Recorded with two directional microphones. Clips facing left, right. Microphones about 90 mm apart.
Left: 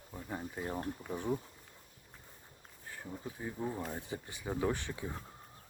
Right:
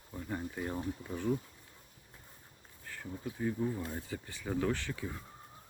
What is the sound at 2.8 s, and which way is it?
Bee, 20° left (ahead or behind).